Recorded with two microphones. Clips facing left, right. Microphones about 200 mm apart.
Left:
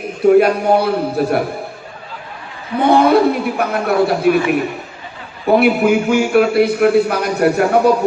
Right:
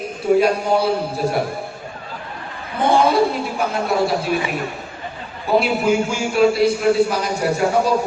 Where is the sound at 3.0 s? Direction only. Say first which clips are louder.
Left 5 dB; 60° left (ahead or behind).